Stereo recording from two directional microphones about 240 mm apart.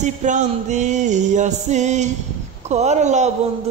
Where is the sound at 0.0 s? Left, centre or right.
Right.